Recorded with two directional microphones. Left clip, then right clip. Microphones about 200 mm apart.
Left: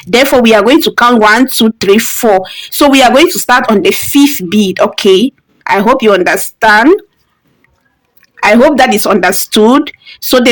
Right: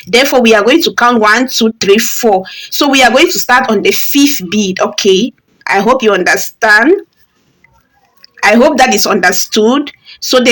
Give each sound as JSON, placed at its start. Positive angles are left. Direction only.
{"t": 0.1, "sound": "speech", "side_deg": 40}
{"t": 8.4, "sound": "a woman's voice", "side_deg": 30}
{"t": 9.3, "sound": "speech", "side_deg": 40}